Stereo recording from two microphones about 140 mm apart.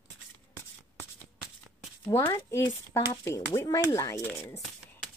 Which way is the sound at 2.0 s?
20° left (ahead or behind).